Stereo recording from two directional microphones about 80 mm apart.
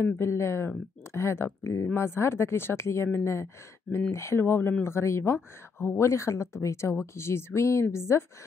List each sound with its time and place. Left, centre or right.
0.0 s speech: left